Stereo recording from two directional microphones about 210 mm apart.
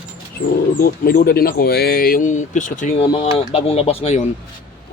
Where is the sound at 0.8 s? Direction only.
45° left (ahead or behind).